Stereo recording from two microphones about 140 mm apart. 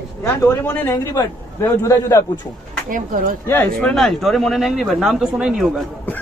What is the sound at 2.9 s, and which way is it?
Speech, 75° right (ahead or behind).